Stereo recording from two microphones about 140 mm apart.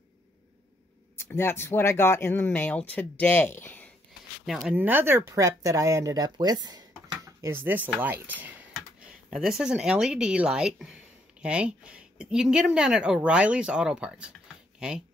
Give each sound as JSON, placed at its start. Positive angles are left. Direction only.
{"t": 1.1, "sound": "speech", "side_deg": 15}
{"t": 4.6, "sound": "speech", "side_deg": -15}
{"t": 7.5, "sound": "speech", "side_deg": -15}